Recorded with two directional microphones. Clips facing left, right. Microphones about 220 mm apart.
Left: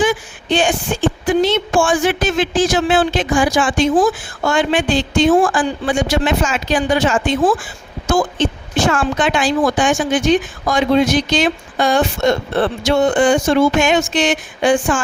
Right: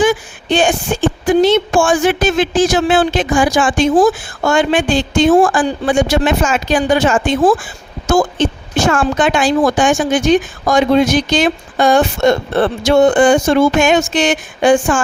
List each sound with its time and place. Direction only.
0.0 s a woman's voice: 45° right (ahead or behind)